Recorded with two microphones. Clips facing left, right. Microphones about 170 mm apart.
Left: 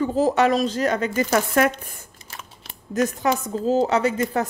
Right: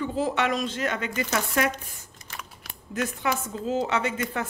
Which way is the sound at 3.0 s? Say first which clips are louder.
Left 6 dB; 40° left (ahead or behind).